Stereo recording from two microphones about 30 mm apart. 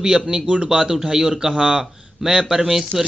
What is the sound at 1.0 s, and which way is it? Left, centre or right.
Speech, centre.